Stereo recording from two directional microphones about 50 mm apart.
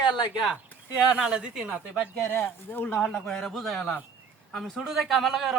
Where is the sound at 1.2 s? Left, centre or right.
Centre.